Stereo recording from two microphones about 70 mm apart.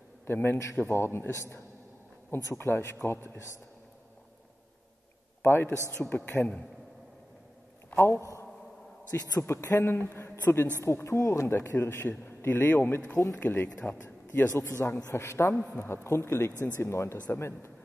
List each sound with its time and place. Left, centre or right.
0.3 s a man's voice: left
5.4 s a man's voice: left
7.9 s a man's voice: left
9.4 s speech: left
9.9 s a man's voice: left
12.1 s a man's voice: left
14.0 s a sound: left
14.7 s a man's voice: left